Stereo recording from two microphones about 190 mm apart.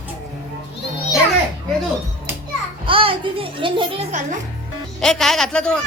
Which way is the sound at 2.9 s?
30° right (ahead or behind).